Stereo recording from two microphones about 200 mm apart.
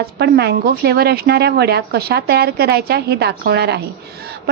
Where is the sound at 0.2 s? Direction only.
55° right (ahead or behind).